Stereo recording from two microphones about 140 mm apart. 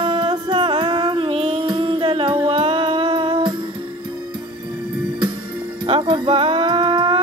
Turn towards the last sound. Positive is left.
turn(degrees=-35)  # may be behind; listen again after turning